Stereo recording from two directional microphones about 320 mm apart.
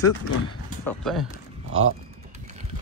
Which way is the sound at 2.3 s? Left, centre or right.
Right.